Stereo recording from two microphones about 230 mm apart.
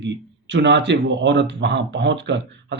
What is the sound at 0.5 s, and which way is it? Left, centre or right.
Speech, right.